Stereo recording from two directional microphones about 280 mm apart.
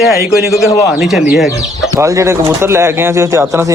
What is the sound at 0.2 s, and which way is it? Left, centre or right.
A man's voice, centre.